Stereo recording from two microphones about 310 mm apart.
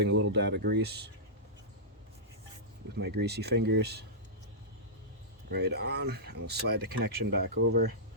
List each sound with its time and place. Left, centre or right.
0.0 s speech: right
3.2 s speech: right
5.5 s speech: right